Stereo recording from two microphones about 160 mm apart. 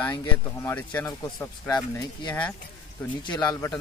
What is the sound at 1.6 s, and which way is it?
Speech, 25° left (ahead or behind).